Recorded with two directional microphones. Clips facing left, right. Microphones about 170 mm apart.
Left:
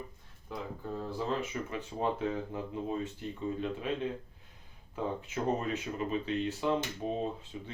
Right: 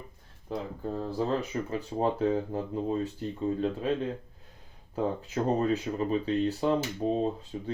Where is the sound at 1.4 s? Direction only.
35° right (ahead or behind).